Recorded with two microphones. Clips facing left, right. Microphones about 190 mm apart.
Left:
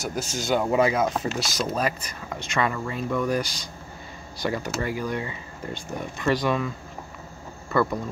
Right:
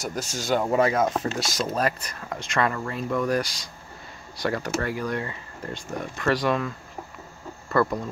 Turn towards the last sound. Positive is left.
turn(degrees=0)  # may be behind; listen again after turning